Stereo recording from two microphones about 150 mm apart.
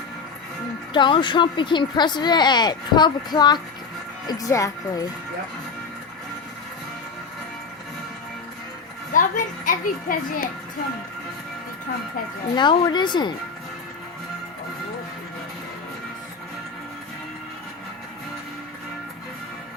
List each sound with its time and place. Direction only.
0.9 s speech: 30° left (ahead or behind)
9.1 s a child's voice: 65° left (ahead or behind)
12.5 s a woman's voice: 30° left (ahead or behind)